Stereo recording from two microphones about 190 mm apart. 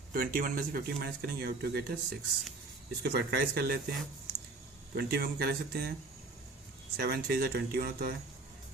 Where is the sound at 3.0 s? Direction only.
60° right (ahead or behind).